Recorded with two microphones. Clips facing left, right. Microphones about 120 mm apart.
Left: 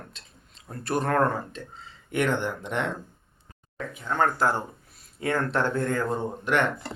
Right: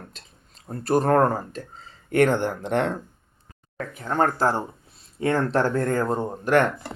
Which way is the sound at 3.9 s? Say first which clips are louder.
Right 2 dB; 40° right (ahead or behind).